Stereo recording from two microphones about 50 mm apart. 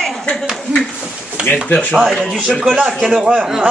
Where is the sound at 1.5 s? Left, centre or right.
Left.